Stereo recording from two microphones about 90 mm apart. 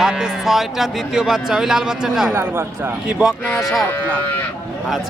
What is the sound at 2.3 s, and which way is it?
Speech, 25° right (ahead or behind).